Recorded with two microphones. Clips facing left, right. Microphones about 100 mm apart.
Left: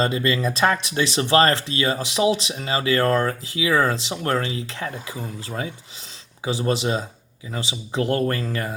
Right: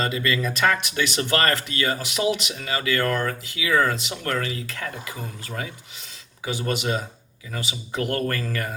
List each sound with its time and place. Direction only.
0.0 s speech: 30° left (ahead or behind)